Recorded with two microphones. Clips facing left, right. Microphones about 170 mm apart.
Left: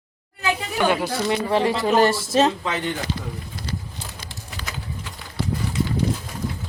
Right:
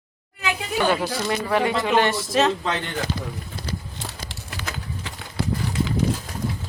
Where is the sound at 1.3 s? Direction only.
25° left (ahead or behind).